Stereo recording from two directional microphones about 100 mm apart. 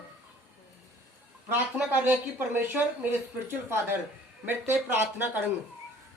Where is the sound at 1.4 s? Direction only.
20° right (ahead or behind).